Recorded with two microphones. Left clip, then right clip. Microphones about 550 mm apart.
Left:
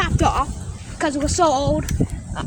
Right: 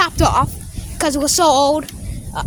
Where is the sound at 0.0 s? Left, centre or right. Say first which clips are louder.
Right 5 dB; right.